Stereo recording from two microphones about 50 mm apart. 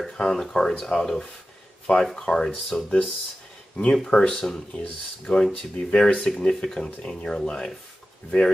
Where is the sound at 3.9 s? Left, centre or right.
Centre.